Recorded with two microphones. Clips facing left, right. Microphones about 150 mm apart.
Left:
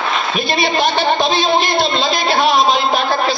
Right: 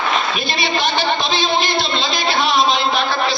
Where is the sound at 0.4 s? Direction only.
45° left (ahead or behind).